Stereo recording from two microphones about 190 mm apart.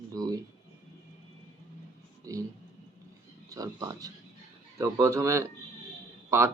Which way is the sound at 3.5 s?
20° right (ahead or behind).